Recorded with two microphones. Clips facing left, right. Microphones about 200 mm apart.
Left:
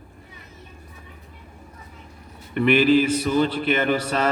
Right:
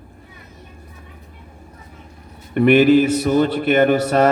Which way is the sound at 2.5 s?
50° right (ahead or behind).